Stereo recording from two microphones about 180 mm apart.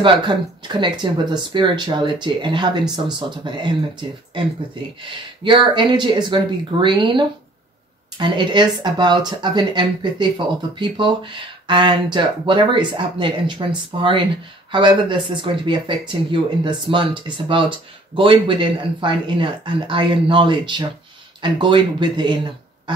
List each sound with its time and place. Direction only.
0.0 s speech: 25° right (ahead or behind)
5.4 s speech: 25° right (ahead or behind)